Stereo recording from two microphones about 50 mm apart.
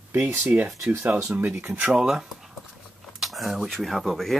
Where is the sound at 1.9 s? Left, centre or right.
Centre.